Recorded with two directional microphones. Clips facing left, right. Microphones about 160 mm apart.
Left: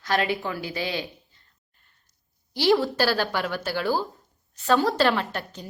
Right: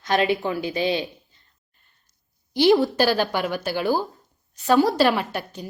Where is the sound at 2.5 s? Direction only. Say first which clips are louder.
Right 4 dB; 20° right (ahead or behind).